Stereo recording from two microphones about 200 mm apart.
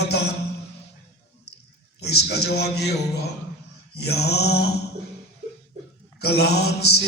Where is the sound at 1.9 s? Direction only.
55° left (ahead or behind).